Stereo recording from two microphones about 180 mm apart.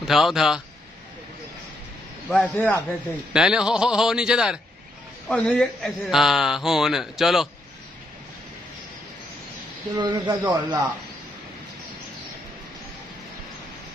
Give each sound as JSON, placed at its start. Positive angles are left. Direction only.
{"t": 0.0, "sound": "speech", "side_deg": 0}
{"t": 2.2, "sound": "speech", "side_deg": 10}
{"t": 3.3, "sound": "speech", "side_deg": -5}
{"t": 9.9, "sound": "speech", "side_deg": -25}